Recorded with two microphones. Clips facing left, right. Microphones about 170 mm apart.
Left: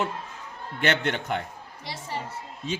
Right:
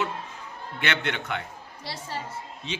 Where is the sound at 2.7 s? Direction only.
45° left (ahead or behind).